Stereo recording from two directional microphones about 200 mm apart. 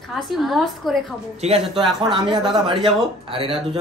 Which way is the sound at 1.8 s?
25° right (ahead or behind).